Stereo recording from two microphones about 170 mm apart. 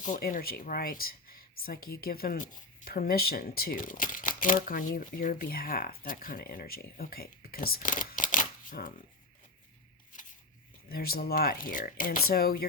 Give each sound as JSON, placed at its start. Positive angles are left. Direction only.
{"t": 0.0, "sound": "speech", "side_deg": 50}
{"t": 10.8, "sound": "speech", "side_deg": 60}